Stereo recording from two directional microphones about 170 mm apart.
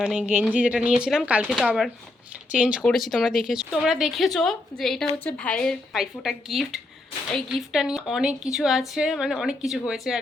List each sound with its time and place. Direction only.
0.0 s a woman's voice: 5° right (ahead or behind)